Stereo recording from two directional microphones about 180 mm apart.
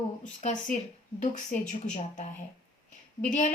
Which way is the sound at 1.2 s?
40° left (ahead or behind).